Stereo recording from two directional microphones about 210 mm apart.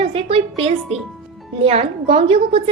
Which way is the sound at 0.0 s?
25° right (ahead or behind).